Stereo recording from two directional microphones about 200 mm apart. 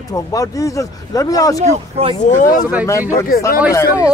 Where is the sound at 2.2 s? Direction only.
40° left (ahead or behind).